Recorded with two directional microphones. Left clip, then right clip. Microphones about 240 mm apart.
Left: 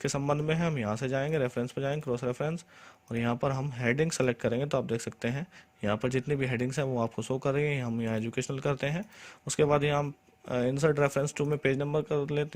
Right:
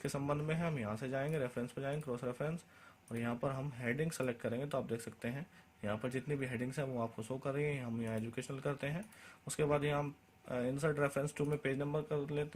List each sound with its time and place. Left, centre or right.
0.0 s speech: left